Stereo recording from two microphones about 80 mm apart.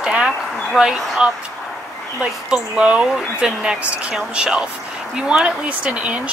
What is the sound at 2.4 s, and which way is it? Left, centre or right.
Speech, centre.